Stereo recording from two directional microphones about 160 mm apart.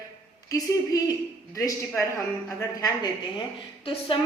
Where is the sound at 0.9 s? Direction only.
20° left (ahead or behind).